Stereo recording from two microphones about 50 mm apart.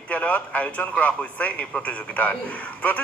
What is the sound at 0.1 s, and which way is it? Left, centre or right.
Speech, left.